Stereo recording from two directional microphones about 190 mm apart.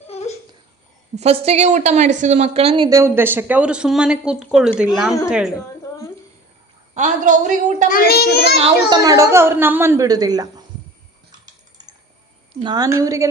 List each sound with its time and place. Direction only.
0.1 s a sound: 35° left (ahead or behind)
1.1 s a woman's voice: 35° right (ahead or behind); by 5.5 s 5° right (ahead or behind)
6.9 s a woman's voice: 40° right (ahead or behind)
7.9 s a child's voice: 50° left (ahead or behind)
8.5 s a woman's voice: 30° right (ahead or behind)
9.0 s speech: 15° right (ahead or behind)
12.6 s speech: 20° right (ahead or behind)